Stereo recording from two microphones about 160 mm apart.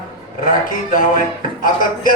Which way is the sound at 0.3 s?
55° left (ahead or behind).